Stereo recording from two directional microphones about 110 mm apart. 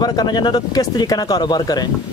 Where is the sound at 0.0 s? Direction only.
40° left (ahead or behind).